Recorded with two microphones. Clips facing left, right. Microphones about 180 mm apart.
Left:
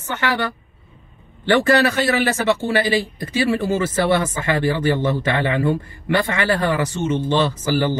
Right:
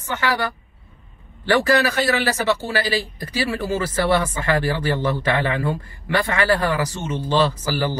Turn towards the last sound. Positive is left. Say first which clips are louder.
# left 4 dB
turn(degrees=25)  # may be behind; listen again after turning